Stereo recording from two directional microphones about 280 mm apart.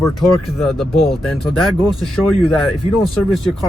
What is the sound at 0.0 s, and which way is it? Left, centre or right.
Speech, centre.